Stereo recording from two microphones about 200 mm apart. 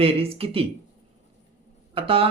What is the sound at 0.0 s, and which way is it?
Speech, 30° right (ahead or behind).